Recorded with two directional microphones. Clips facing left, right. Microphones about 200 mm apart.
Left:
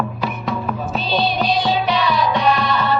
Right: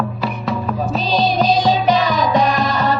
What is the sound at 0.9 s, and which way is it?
Music, 40° right (ahead or behind).